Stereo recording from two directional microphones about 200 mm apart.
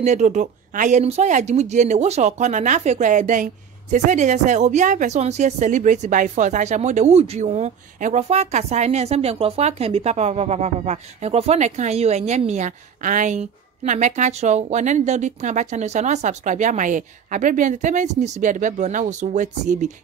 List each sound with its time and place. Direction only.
0.0 s speech: 35° right (ahead or behind)